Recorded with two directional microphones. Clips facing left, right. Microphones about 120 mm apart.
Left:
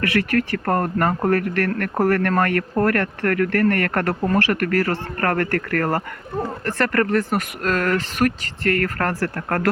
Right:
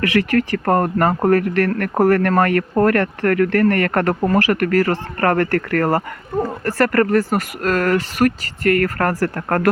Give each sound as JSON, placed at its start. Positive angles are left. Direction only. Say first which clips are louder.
{"t": 0.1, "sound": "speech", "louder": "right 3 dB", "side_deg": -15}